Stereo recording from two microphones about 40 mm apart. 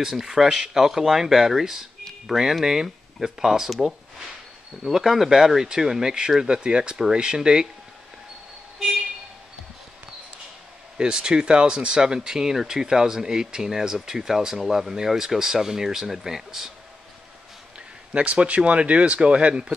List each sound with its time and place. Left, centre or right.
0.0 s speech: centre
4.8 s speech: centre
6.4 s speech: right
11.0 s speech: centre
18.1 s speech: right